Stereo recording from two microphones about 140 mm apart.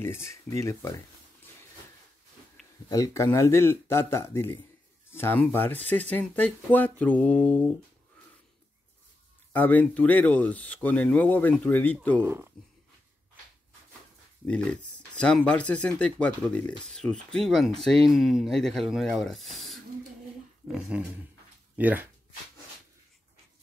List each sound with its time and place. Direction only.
0.0 s speech: 20° left (ahead or behind)
2.9 s speech: 25° left (ahead or behind)
9.5 s speech: 10° left (ahead or behind)
12.2 s speech: 20° right (ahead or behind)
14.4 s speech: 10° left (ahead or behind)
19.5 s a sound: centre (ahead or behind)
20.6 s speech: 10° right (ahead or behind)